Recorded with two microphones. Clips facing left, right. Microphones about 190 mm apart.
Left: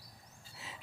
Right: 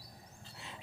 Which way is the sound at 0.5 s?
5° left (ahead or behind).